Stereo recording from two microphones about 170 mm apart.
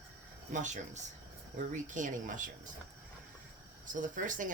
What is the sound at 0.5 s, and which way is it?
Speech, 45° right (ahead or behind).